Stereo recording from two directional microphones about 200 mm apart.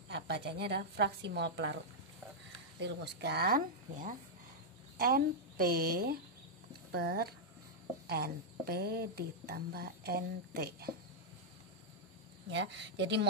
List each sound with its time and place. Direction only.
0.1 s a woman's voice: 55° right (ahead or behind)
2.8 s a woman's voice: 55° right (ahead or behind)
12.5 s a woman's voice: 60° right (ahead or behind)